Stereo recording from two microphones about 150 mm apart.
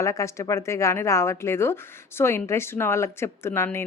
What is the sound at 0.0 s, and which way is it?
A woman's voice, 20° left (ahead or behind).